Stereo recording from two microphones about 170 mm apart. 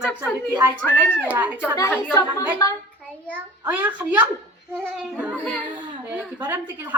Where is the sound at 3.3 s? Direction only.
10° right (ahead or behind).